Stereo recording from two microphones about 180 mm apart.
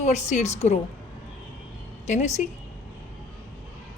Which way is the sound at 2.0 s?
40° left (ahead or behind).